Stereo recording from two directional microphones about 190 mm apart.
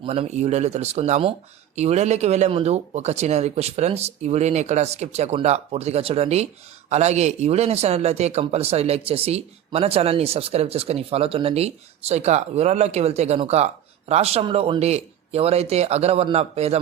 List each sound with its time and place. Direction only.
0.0 s speech: 35° right (ahead or behind)